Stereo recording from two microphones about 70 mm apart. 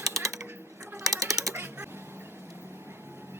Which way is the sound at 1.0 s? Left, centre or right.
Right.